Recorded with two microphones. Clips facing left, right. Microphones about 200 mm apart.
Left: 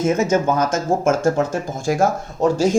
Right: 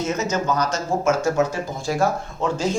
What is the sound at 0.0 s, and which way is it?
Speech, 50° left (ahead or behind).